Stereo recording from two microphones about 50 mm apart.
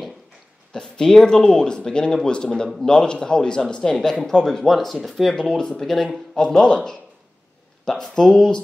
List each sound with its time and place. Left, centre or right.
0.7 s a man's voice: centre
4.6 s a man's voice: centre